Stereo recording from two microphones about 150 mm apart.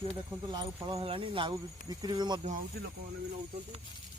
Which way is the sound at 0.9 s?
40° right (ahead or behind).